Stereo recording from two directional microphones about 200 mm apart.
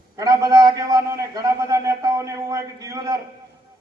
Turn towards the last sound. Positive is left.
turn(degrees=-15)  # may be behind; listen again after turning